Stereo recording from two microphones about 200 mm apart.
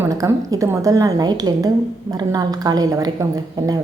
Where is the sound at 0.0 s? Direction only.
15° right (ahead or behind).